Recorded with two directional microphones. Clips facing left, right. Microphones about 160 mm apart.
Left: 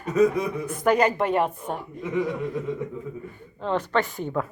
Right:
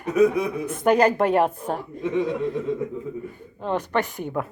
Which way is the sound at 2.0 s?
25° right (ahead or behind).